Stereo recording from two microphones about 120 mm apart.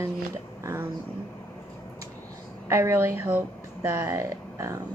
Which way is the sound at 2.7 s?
20° right (ahead or behind).